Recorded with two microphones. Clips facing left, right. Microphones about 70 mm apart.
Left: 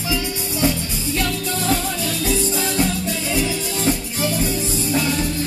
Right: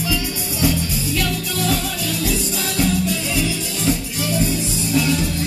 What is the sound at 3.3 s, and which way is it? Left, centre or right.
Music, left.